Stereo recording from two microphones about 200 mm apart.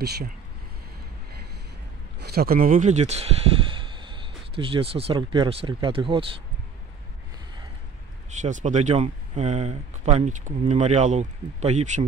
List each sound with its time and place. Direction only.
2.1 s speech: 50° right (ahead or behind); by 6.2 s 25° right (ahead or behind)
8.4 s speech: 35° right (ahead or behind)